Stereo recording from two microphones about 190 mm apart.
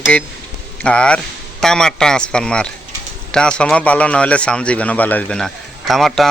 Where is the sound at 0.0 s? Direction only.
5° left (ahead or behind).